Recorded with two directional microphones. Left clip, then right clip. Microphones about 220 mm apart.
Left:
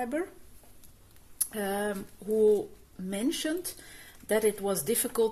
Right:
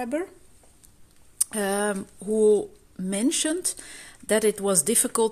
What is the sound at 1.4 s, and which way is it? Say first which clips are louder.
Speech: right 6 dB; 35° right (ahead or behind).